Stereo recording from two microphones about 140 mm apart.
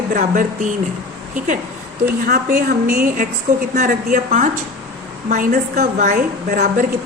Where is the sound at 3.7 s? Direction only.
70° right (ahead or behind).